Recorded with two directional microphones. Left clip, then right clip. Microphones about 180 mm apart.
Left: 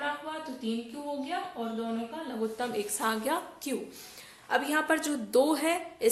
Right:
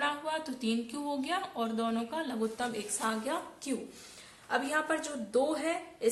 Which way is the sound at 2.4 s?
25° left (ahead or behind).